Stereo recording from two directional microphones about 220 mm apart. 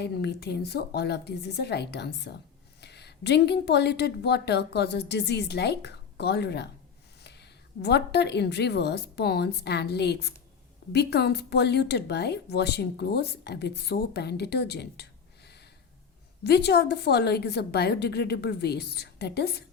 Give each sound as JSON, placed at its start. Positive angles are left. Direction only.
{"t": 0.0, "sound": "a woman's voice", "side_deg": 50}
{"t": 16.4, "sound": "speech", "side_deg": 50}